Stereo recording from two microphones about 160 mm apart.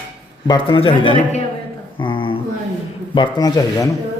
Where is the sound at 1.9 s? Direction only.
30° left (ahead or behind).